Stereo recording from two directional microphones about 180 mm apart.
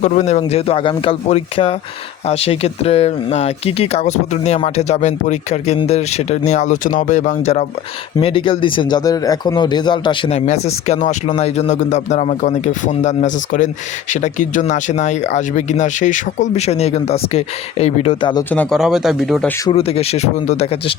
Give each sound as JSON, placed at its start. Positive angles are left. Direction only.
{"t": 0.0, "sound": "speech", "side_deg": 40}
{"t": 8.2, "sound": "speech", "side_deg": 30}
{"t": 18.5, "sound": "speech", "side_deg": 5}
{"t": 19.6, "sound": "speech", "side_deg": 30}